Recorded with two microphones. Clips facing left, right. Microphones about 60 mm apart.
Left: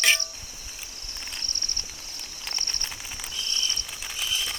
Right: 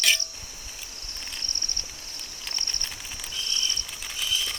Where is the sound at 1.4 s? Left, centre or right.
Right.